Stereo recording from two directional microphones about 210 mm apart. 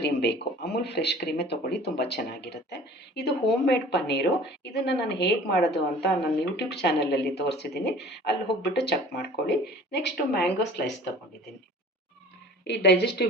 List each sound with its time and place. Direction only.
0.0 s speech: 50° left (ahead or behind)
12.6 s speech: 55° left (ahead or behind)